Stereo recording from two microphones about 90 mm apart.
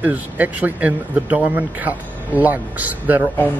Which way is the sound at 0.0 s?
20° right (ahead or behind).